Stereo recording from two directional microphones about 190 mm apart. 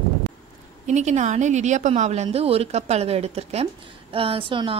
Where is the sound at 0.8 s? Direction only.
35° right (ahead or behind).